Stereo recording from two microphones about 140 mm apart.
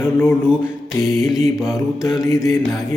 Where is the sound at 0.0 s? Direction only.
15° left (ahead or behind).